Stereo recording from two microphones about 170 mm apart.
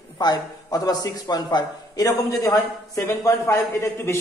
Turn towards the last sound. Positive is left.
turn(degrees=15)  # may be behind; listen again after turning